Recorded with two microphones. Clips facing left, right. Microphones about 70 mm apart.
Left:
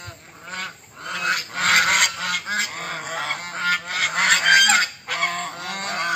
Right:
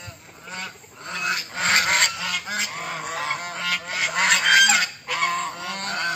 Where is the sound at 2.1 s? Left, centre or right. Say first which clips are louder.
Left 3 dB; left.